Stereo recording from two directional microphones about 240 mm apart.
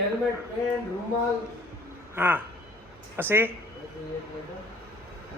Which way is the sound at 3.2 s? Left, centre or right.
Centre.